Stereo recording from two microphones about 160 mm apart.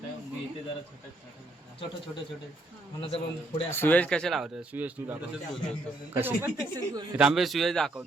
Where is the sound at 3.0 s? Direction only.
35° left (ahead or behind).